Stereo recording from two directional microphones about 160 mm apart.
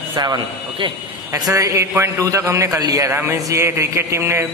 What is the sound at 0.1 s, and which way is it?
A man's voice, 25° right (ahead or behind).